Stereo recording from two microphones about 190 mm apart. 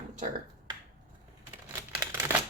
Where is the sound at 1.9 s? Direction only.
15° right (ahead or behind).